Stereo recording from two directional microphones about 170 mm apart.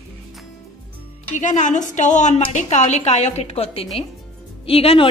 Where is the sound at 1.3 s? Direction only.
45° left (ahead or behind).